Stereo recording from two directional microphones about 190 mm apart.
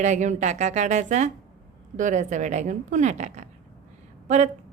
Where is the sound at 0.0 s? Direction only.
40° right (ahead or behind).